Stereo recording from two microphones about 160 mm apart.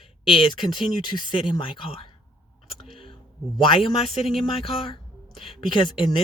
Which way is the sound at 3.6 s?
30° left (ahead or behind).